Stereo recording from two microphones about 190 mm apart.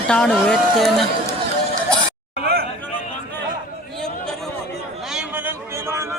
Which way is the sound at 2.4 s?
55° right (ahead or behind).